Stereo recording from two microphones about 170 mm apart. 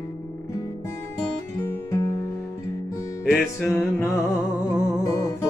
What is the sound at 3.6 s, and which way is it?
Music, 15° left (ahead or behind).